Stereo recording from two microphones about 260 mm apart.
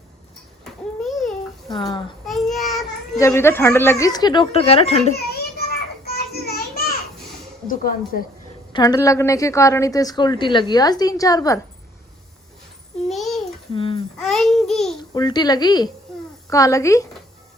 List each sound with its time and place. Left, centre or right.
0.6 s a sound: centre
1.7 s a child's voice: centre
2.2 s child singing: centre
3.2 s a woman's voice: centre
5.1 s a sound: left
7.7 s speech: left
8.7 s a woman's voice: centre
13.1 s a sound: centre
13.7 s babbling: left
14.2 s babbling: centre
15.1 s a woman's voice: centre